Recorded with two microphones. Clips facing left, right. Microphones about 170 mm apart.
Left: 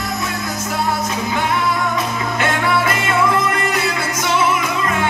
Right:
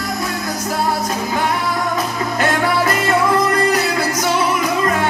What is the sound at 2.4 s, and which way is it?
Music, 40° right (ahead or behind).